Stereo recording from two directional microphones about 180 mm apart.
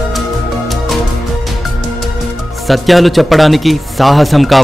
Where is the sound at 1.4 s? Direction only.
Centre (ahead or behind).